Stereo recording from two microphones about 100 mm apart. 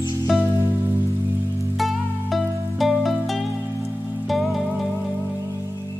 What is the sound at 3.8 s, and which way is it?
Music, 20° right (ahead or behind).